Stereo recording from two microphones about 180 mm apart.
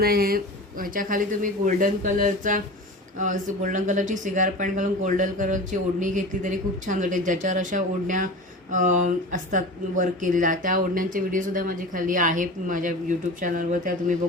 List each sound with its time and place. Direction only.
0.0 s speech: 55° right (ahead or behind)